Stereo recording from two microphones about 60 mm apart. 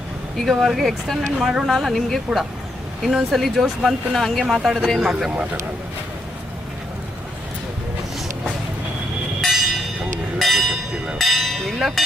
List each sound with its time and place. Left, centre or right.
0.3 s speech: centre
9.4 s a sound: centre
10.3 s bell: centre
11.2 s speech: centre